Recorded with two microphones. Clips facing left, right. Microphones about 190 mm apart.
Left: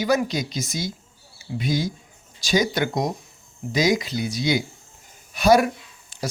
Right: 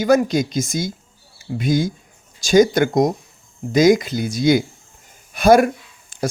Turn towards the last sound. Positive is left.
turn(degrees=-50)  # may be behind; listen again after turning